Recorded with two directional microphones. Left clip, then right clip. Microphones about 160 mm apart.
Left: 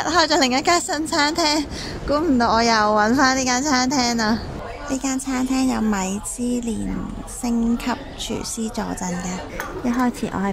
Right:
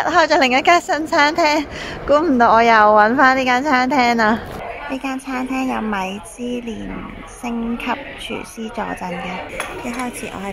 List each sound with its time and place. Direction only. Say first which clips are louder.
0.0 s speech: right 4 dB; 10° left (ahead or behind)
4.9 s speech: left 1 dB; 20° left (ahead or behind)
7.4 s speech: even; 15° left (ahead or behind)